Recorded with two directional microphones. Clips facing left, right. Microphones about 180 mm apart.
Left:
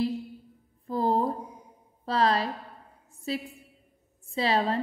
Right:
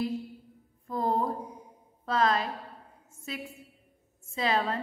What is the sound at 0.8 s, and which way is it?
Music, 30° left (ahead or behind).